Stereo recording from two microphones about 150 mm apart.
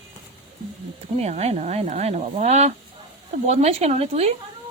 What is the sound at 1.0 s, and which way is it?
Speech, 45° right (ahead or behind).